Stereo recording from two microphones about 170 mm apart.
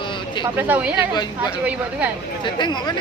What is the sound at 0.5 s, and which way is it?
Speech, 10° right (ahead or behind).